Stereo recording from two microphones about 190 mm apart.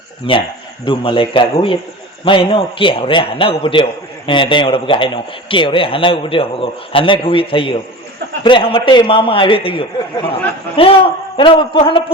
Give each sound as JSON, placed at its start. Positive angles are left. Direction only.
{"t": 0.3, "sound": "speech", "side_deg": 30}